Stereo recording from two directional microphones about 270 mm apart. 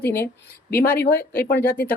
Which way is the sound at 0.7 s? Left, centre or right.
Left.